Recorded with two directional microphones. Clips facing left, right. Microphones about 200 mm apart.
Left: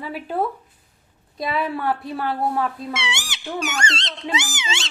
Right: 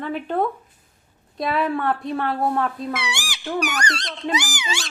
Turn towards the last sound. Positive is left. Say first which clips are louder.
# right 1 dB
turn(degrees=25)  # may be behind; listen again after turning